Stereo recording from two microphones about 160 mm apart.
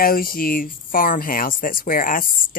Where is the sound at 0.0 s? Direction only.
65° left (ahead or behind).